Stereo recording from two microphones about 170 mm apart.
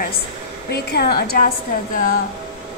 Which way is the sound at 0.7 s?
70° left (ahead or behind).